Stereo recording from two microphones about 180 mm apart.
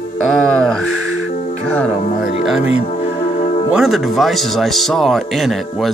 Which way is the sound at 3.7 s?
Centre (ahead or behind).